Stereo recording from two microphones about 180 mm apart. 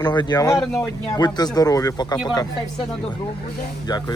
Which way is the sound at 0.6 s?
Centre (ahead or behind).